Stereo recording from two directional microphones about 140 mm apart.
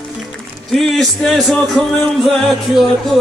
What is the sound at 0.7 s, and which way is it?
Speech, centre (ahead or behind).